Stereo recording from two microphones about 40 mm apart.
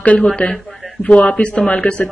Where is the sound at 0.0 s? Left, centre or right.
Left.